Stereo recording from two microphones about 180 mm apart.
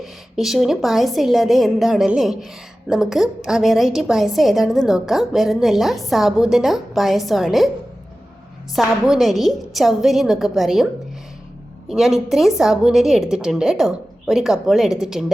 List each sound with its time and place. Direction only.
0.0 s a woman's voice: centre (ahead or behind)
8.7 s a woman's voice: centre (ahead or behind)
11.9 s a woman's voice: centre (ahead or behind)